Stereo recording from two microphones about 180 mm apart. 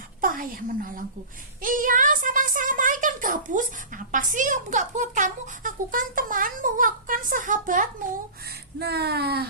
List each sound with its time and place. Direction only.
0.2 s a woman's voice: 50° right (ahead or behind)
8.8 s speech: 65° right (ahead or behind)